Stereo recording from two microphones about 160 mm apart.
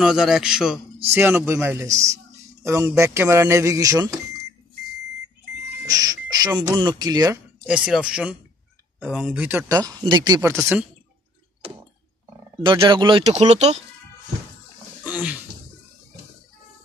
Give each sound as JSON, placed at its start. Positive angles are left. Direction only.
{"t": 0.0, "sound": "a man's voice", "side_deg": -5}
{"t": 1.1, "sound": "speech", "side_deg": -15}
{"t": 5.9, "sound": "speech", "side_deg": -25}
{"t": 7.6, "sound": "a man's voice", "side_deg": -5}
{"t": 9.4, "sound": "speech", "side_deg": -10}
{"t": 9.8, "sound": "speech", "side_deg": -25}
{"t": 12.8, "sound": "speech", "side_deg": -30}
{"t": 13.2, "sound": "speech", "side_deg": -45}
{"t": 15.0, "sound": "a sound", "side_deg": -10}